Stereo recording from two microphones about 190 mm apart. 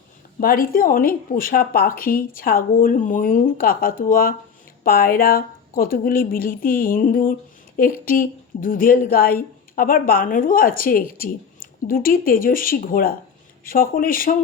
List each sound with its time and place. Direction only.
0.3 s a woman's voice: 50° left (ahead or behind)